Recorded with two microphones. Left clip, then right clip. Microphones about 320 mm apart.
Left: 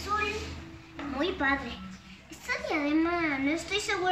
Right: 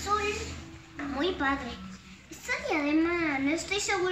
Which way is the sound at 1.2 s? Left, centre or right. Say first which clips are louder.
Left 1 dB; centre.